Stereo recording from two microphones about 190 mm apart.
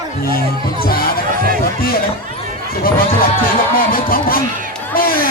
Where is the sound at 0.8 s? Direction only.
50° left (ahead or behind).